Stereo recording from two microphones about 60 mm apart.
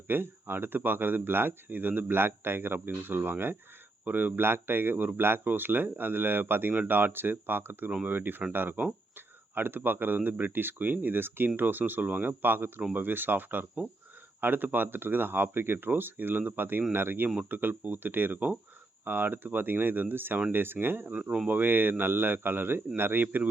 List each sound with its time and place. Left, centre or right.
0.1 s speech: right
21.1 s speech: centre